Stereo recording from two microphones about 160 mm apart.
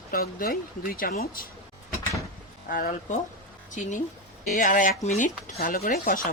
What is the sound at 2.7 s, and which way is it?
Speech, 60° left (ahead or behind).